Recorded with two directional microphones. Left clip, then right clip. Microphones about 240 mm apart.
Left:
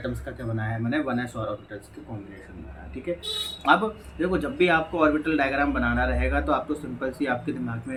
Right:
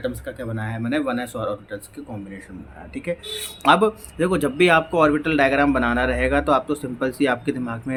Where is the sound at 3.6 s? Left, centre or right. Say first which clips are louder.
Right 5 dB; right.